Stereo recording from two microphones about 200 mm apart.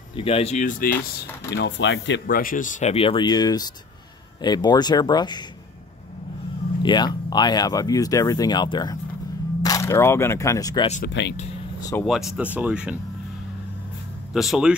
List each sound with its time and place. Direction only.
0.1 s speech: 25° left (ahead or behind); by 1.2 s 45° left (ahead or behind)
1.5 s speech: 60° left (ahead or behind); by 5.4 s 20° left (ahead or behind)
6.8 s speech: 20° left (ahead or behind)
11.1 s speech: 60° left (ahead or behind)
11.8 s speech: 15° left (ahead or behind)
12.1 s speech: centre (ahead or behind)
14.3 s speech: centre (ahead or behind)